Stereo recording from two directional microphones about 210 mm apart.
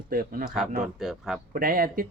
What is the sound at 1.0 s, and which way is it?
Speech, centre (ahead or behind).